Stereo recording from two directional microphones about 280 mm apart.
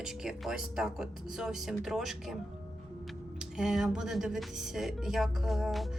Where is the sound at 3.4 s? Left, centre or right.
Centre.